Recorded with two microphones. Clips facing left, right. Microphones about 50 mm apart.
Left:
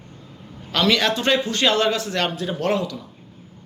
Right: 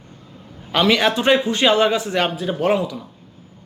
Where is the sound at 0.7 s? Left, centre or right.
Centre.